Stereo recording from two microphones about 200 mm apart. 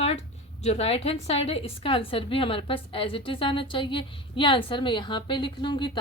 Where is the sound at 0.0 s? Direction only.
30° left (ahead or behind).